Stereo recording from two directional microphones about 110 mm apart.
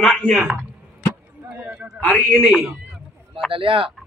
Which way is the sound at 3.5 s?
55° right (ahead or behind).